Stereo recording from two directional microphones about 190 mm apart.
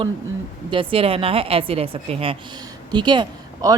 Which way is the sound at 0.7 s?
30° right (ahead or behind).